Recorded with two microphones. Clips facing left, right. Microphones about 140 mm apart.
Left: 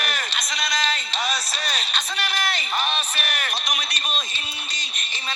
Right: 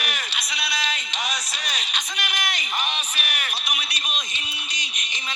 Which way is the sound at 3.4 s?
40° left (ahead or behind).